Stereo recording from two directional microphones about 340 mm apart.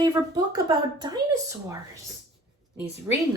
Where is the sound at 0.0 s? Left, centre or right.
Centre.